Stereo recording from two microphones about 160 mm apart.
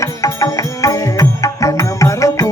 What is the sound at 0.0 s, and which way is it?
Music, 20° left (ahead or behind).